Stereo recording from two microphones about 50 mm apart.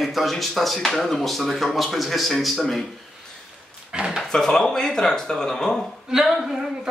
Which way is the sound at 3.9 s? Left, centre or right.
Centre.